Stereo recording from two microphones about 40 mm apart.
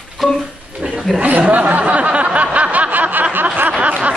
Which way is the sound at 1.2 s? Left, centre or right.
Right.